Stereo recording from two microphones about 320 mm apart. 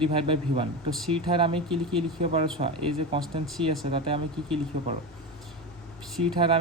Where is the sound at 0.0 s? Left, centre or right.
Centre.